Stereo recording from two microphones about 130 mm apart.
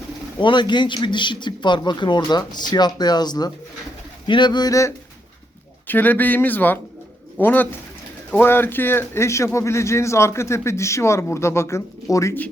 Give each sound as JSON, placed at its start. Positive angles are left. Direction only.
{"t": 0.3, "sound": "a man's voice", "side_deg": 35}
{"t": 5.9, "sound": "speech", "side_deg": 15}